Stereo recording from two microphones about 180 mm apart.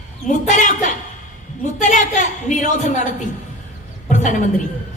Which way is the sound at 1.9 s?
40° left (ahead or behind).